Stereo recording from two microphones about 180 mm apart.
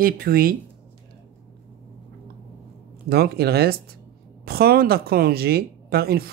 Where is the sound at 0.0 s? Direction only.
55° right (ahead or behind).